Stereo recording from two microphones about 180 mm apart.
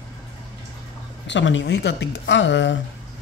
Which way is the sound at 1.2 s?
85° left.